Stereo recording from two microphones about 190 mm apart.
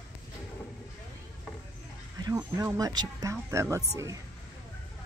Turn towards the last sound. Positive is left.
turn(degrees=-15)  # may be behind; listen again after turning